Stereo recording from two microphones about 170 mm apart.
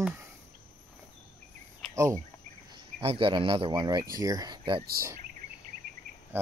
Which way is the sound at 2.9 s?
30° right (ahead or behind).